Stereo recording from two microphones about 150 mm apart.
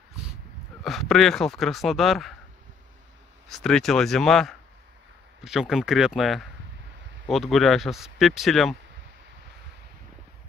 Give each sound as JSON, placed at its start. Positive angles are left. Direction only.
{"t": 0.8, "sound": "speech", "side_deg": 0}
{"t": 3.4, "sound": "speech", "side_deg": 5}